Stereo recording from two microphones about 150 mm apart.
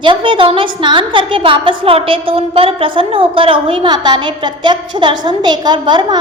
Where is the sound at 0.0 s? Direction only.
35° right (ahead or behind).